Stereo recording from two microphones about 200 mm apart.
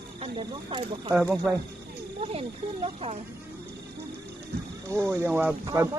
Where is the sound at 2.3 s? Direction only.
30° right (ahead or behind).